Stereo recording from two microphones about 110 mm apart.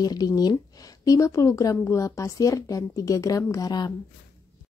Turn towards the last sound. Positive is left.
turn(degrees=35)  # may be behind; listen again after turning